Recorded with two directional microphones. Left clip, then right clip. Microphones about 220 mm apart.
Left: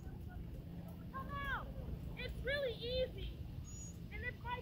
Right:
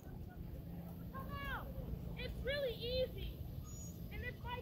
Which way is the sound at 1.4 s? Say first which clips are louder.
Left 3 dB; 5° right (ahead or behind).